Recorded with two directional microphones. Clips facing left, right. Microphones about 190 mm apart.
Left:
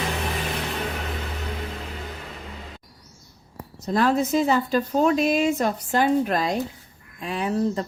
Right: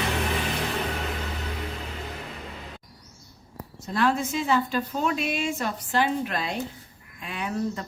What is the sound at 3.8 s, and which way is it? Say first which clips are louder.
A woman's voice: left 4 dB; 40° left (ahead or behind).